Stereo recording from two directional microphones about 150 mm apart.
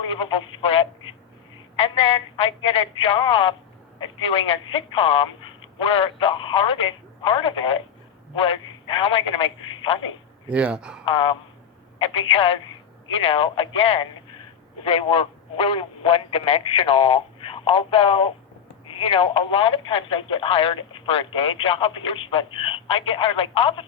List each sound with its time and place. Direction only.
0.0 s speech: 35° left (ahead or behind)
10.5 s speech: 10° right (ahead or behind)
11.0 s speech: 35° left (ahead or behind)